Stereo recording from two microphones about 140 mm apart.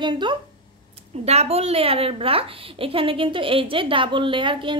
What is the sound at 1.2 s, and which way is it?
A woman's voice, 50° right (ahead or behind).